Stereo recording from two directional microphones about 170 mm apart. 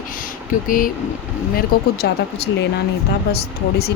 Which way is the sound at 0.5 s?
55° left (ahead or behind).